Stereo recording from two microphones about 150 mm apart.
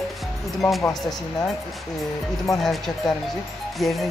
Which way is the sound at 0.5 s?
Centre (ahead or behind).